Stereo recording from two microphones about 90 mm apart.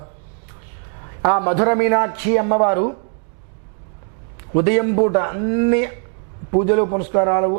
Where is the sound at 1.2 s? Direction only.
15° right (ahead or behind).